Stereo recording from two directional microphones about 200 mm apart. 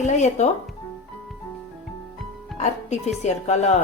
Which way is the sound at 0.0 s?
35° left (ahead or behind).